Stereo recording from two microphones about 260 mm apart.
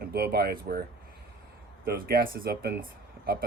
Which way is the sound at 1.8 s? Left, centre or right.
Right.